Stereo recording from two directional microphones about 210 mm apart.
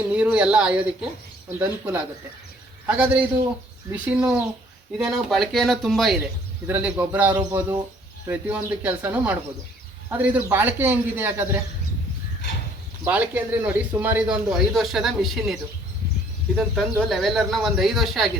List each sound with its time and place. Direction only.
0.1 s a man's voice: 5° right (ahead or behind)
7.3 s speech: 20° right (ahead or behind)
8.3 s a man's voice: 10° right (ahead or behind)
13.1 s a man's voice: 5° right (ahead or behind)
16.6 s a man's voice: centre (ahead or behind)